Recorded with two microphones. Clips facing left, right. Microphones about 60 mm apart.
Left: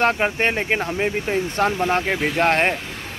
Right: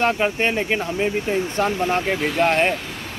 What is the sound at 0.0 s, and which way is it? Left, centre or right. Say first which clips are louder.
Speech: left 1 dB; left.